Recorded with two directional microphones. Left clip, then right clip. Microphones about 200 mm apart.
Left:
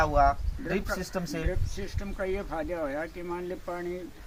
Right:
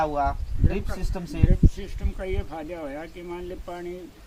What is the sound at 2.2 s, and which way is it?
Speech, 15° right (ahead or behind).